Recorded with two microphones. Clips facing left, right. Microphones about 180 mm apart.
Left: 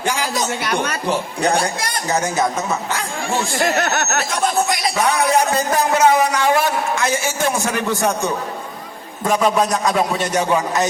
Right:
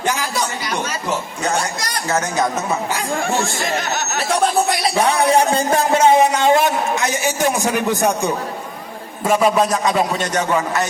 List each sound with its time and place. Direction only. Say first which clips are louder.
0.6 s speech: left 3 dB; 60° left (ahead or behind)
1.4 s speech: left 3 dB; 35° left (ahead or behind)
3.6 s speech: left 3 dB; 60° left (ahead or behind)
4.9 s a sound: right 2 dB; 30° right (ahead or behind)
9.2 s a man's voice: right 1 dB; 5° right (ahead or behind)
10.3 s a man's voice: left 1 dB; 10° left (ahead or behind)